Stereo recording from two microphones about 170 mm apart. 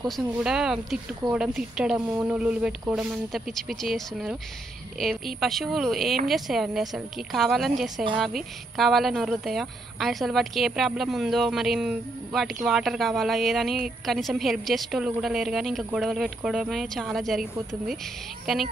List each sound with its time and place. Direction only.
0.2 s speech: 5° right (ahead or behind)
18.5 s speech: centre (ahead or behind)